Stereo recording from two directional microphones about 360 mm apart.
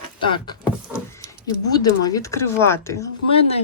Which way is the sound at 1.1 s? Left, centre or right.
Centre.